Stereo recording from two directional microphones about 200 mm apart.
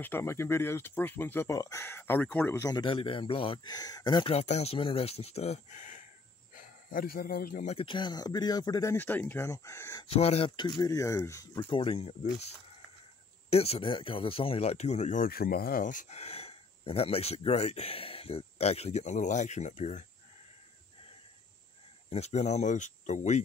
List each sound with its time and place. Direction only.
0.0 s speech: 10° left (ahead or behind); by 7.7 s 45° left (ahead or behind)
7.7 s speech: 25° left (ahead or behind)
10.0 s speech: 30° left (ahead or behind); by 11.6 s 15° left (ahead or behind)
11.7 s speech: 25° left (ahead or behind)
22.1 s speech: 35° left (ahead or behind)